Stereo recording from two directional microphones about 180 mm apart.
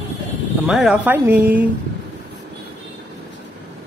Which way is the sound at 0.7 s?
5° right (ahead or behind).